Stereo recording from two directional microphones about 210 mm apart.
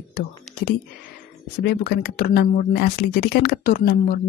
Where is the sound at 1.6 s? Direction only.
50° left (ahead or behind).